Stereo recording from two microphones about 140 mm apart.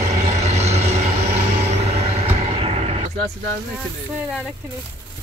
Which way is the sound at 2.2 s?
45° right (ahead or behind).